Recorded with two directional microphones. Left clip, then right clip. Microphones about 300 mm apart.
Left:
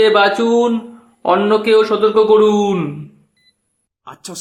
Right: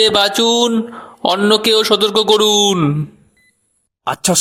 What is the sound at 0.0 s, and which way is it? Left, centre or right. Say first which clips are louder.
A man's voice: left 1 dB; right.